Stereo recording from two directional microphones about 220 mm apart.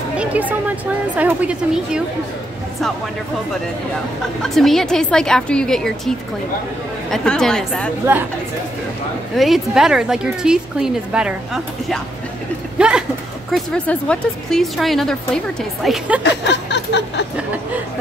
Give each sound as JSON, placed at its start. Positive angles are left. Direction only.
{"t": 0.2, "sound": "a woman's voice", "side_deg": -5}
{"t": 4.4, "sound": "speech", "side_deg": 0}
{"t": 9.3, "sound": "speech", "side_deg": 0}
{"t": 16.2, "sound": "a sound", "side_deg": 50}